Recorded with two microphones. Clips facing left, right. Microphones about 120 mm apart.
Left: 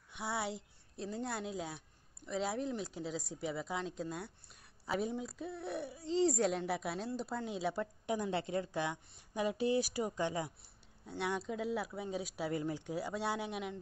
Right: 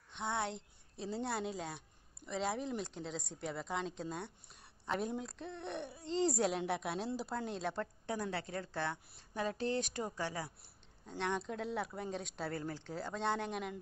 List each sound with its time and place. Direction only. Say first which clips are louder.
0.1 s a sound: even; 5° left (ahead or behind)
2.2 s a woman's voice: left 1 dB; centre (ahead or behind)
10.1 s a woman's voice: left 4 dB; 20° left (ahead or behind)
11.1 s speech: even; 10° left (ahead or behind)